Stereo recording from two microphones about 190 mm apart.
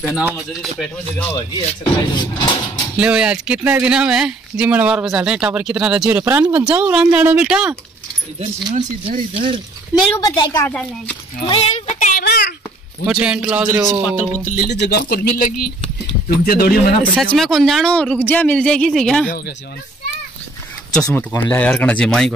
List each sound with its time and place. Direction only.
0.1 s speech: centre (ahead or behind)
1.6 s speech: 25° left (ahead or behind)
3.0 s speech: 5° right (ahead or behind)
8.7 s speech: 40° right (ahead or behind)
10.1 s speech: 20° left (ahead or behind)
10.7 s speech: 5° left (ahead or behind)
11.4 s a sound: 30° left (ahead or behind)
12.3 s a sound: 60° left (ahead or behind)
13.0 s speech: 5° right (ahead or behind)
14.4 s speech: 45° left (ahead or behind)
17.1 s speech: centre (ahead or behind)
19.2 s speech: 50° left (ahead or behind)
20.9 s speech: 5° left (ahead or behind)